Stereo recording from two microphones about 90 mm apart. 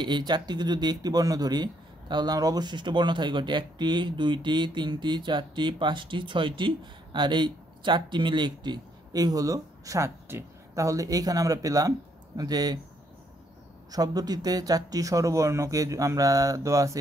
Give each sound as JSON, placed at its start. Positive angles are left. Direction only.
{"t": 0.0, "sound": "speech", "side_deg": -55}
{"t": 13.9, "sound": "speech", "side_deg": -45}